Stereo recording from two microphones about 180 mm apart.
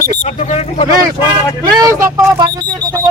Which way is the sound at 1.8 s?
15° right (ahead or behind).